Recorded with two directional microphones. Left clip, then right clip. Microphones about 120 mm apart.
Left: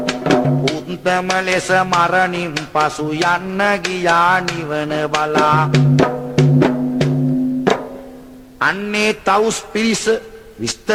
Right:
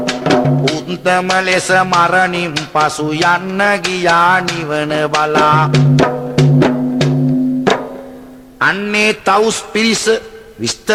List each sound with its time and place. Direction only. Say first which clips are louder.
0.0 s music: right 3 dB; 35° left (ahead or behind)
8.5 s a man's voice: right 4 dB; 40° left (ahead or behind)